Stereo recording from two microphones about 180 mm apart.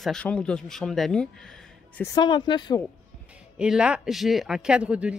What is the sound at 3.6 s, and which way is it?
A man's voice, 5° right (ahead or behind).